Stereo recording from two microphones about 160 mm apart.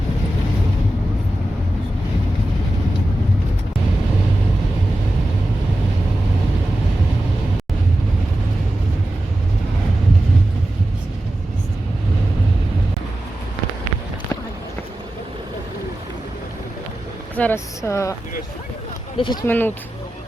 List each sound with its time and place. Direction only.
17.3 s speech: 10° left (ahead or behind)
19.1 s speech: 30° left (ahead or behind)
19.5 s speech: 10° left (ahead or behind)